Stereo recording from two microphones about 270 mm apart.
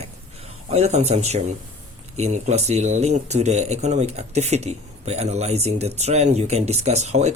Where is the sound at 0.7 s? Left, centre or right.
Right.